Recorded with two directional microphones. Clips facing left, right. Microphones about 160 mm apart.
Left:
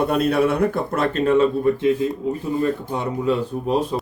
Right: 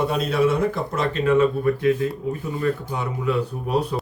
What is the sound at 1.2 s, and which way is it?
Speech, 30° left (ahead or behind).